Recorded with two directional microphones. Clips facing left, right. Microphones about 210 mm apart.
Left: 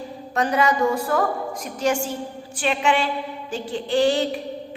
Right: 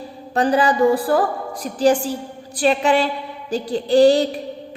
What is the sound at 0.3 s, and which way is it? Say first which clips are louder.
A woman's voice: right 4 dB; 30° right (ahead or behind).